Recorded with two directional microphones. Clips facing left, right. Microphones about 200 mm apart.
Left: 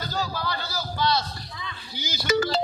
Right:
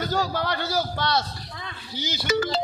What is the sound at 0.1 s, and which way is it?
A man's voice, 75° right (ahead or behind).